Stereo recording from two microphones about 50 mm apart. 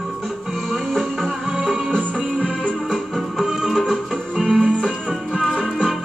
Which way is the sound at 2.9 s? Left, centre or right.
Centre.